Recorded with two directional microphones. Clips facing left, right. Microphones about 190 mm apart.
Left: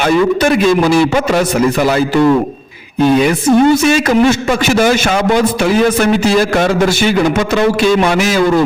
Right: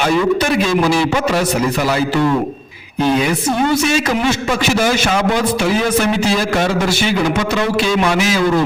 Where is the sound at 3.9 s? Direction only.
55° left (ahead or behind).